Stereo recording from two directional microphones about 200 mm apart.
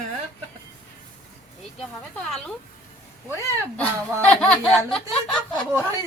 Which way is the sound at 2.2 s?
5° left (ahead or behind).